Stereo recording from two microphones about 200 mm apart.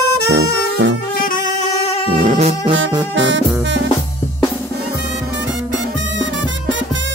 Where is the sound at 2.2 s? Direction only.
35° right (ahead or behind).